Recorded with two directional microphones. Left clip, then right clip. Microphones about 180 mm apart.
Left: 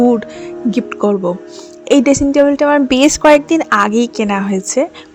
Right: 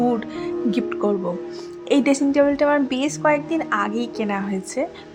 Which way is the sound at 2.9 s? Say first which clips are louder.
Left 11 dB; 50° left (ahead or behind).